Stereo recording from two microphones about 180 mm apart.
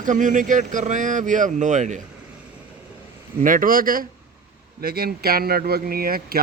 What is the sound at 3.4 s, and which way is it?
A man's voice, 50° right (ahead or behind).